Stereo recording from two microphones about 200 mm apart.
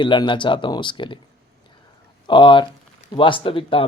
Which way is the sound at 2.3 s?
25° left (ahead or behind).